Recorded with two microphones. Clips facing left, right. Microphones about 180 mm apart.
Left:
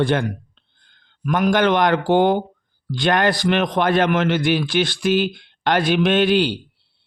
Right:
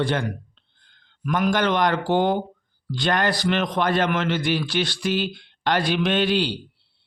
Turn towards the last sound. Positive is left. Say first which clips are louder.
# left 5 dB
turn(degrees=50)  # may be behind; listen again after turning